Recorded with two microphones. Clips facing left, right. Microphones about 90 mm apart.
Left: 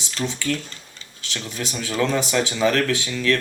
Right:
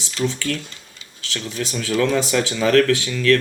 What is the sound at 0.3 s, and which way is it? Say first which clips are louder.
Speech: right 1 dB; 20° left (ahead or behind).